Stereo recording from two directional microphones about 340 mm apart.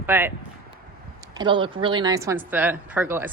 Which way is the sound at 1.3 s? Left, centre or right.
Centre.